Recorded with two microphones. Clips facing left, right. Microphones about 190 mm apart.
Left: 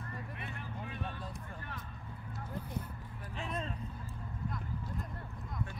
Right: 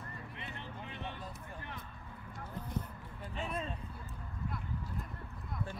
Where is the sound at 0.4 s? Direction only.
25° right (ahead or behind).